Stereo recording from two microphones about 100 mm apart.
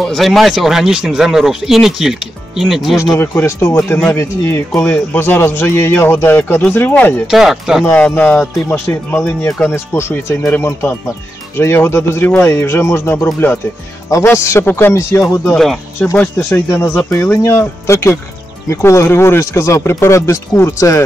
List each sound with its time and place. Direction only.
0.0 s speech: centre (ahead or behind)
3.0 s speech: 30° left (ahead or behind)
7.2 s speech: 5° right (ahead or behind)
7.8 s speech: 20° left (ahead or behind)
15.5 s speech: centre (ahead or behind)
16.3 s speech: 20° left (ahead or behind)